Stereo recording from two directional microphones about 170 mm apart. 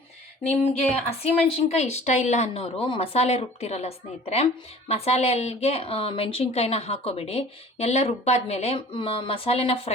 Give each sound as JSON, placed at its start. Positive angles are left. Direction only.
{"t": 1.2, "sound": "speech", "side_deg": 40}